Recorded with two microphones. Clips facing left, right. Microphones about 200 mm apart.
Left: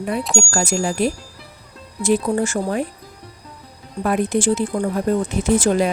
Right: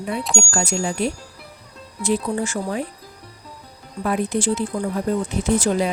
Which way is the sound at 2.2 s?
45° left (ahead or behind).